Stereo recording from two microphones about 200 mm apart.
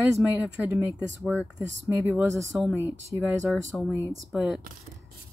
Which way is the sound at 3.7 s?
Centre (ahead or behind).